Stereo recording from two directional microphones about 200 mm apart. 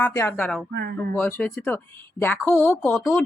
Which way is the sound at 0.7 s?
55° right (ahead or behind).